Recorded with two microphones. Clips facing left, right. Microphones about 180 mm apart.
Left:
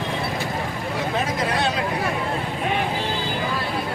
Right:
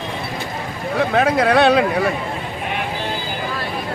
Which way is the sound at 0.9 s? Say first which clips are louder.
Right 9 dB; 65° right (ahead or behind).